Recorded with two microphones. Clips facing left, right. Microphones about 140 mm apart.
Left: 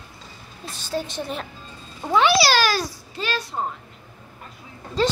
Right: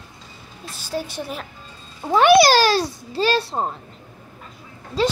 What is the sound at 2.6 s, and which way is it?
A child's voice, 30° right (ahead or behind).